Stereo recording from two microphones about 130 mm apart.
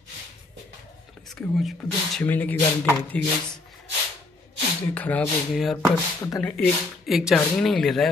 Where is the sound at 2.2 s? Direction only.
15° left (ahead or behind).